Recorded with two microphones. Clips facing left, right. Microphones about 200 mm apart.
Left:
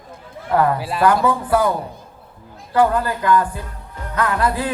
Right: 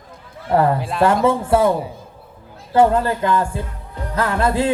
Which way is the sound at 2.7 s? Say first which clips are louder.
Right 2 dB; 25° right (ahead or behind).